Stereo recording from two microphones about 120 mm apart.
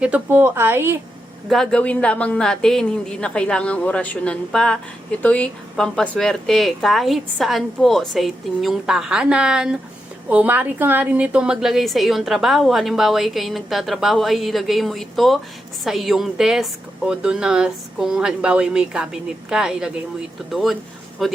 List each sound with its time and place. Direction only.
0.0 s a woman's voice: 15° right (ahead or behind)
1.5 s a woman's voice: 5° left (ahead or behind)